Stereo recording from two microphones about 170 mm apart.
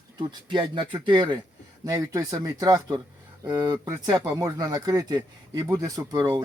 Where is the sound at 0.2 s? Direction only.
25° right (ahead or behind).